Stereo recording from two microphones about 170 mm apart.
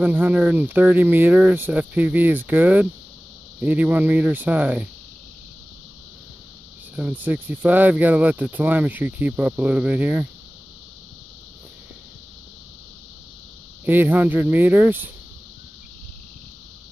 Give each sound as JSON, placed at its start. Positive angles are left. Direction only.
{"t": 0.0, "sound": "speech", "side_deg": -10}
{"t": 7.0, "sound": "speech", "side_deg": -10}
{"t": 13.8, "sound": "speech", "side_deg": -10}